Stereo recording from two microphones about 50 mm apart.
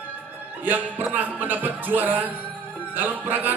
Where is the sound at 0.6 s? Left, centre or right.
Right.